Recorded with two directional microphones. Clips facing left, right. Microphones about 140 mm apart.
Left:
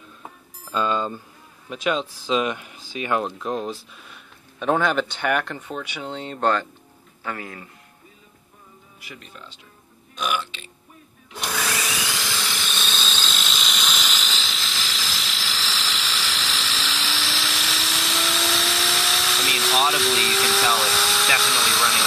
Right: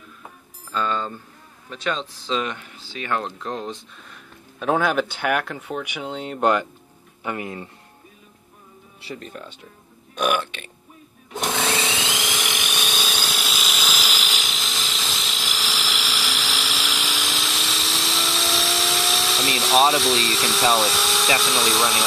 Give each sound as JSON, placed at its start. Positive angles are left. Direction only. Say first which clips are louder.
{"t": 0.7, "sound": "speech", "louder": "left 2 dB", "side_deg": 15}
{"t": 9.0, "sound": "speech", "louder": "right 9 dB", "side_deg": -35}
{"t": 10.1, "sound": "speech", "louder": "right 4 dB", "side_deg": -55}
{"t": 11.5, "sound": "tools", "louder": "right 2 dB", "side_deg": -25}